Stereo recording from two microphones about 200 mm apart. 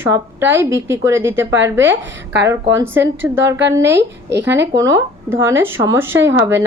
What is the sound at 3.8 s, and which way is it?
Speech, 60° right (ahead or behind).